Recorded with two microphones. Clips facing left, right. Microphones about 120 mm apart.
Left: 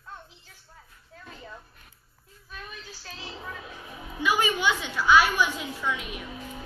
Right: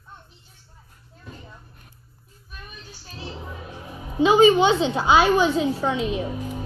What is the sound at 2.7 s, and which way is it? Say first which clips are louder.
Child singing: left 1 dB; 90° left.